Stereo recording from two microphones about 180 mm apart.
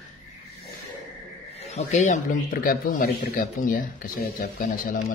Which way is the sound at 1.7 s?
40° left (ahead or behind).